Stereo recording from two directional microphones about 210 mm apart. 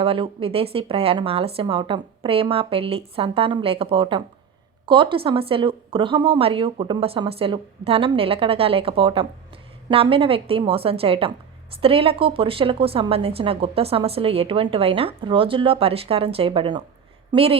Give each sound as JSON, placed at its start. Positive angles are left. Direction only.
{"t": 0.0, "sound": "a woman's voice", "side_deg": -25}